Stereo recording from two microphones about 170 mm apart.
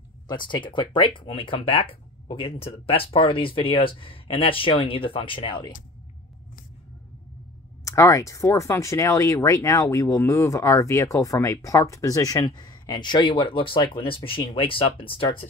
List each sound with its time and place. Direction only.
0.3 s speech: 25° left (ahead or behind)
7.8 s speech: 20° left (ahead or behind)